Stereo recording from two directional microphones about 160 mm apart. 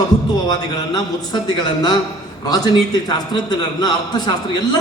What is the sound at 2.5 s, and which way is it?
A man's voice, 25° left (ahead or behind).